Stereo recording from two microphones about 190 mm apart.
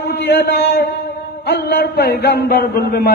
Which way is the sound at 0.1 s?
60° left (ahead or behind).